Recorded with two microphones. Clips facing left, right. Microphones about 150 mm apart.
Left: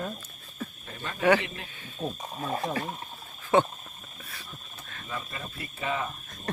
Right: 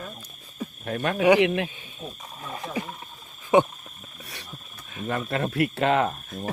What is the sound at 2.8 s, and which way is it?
Speech, 15° right (ahead or behind).